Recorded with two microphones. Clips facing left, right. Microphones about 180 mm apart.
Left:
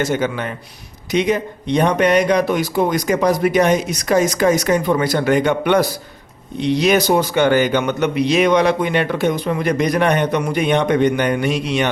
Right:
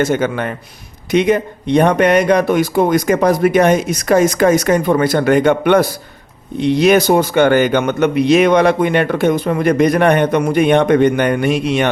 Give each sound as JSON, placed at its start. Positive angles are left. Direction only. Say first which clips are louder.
{"t": 0.0, "sound": "speech", "louder": "right 4 dB", "side_deg": -55}